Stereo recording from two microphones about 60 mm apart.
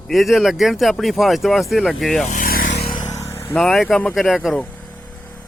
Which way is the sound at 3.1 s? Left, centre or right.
Left.